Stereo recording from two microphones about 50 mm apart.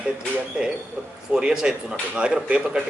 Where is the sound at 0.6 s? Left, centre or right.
Centre.